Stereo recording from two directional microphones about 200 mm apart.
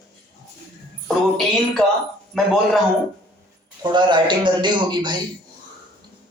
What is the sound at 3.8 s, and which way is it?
Speech, 20° right (ahead or behind).